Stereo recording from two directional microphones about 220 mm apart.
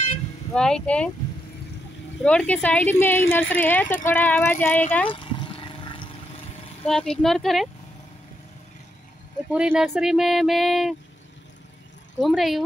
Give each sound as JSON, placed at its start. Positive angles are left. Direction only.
{"t": 0.5, "sound": "speech", "side_deg": 5}
{"t": 2.2, "sound": "speech", "side_deg": 5}
{"t": 5.1, "sound": "wild animals", "side_deg": 25}
{"t": 6.8, "sound": "speech", "side_deg": 5}
{"t": 9.5, "sound": "speech", "side_deg": -5}
{"t": 12.2, "sound": "speech", "side_deg": 0}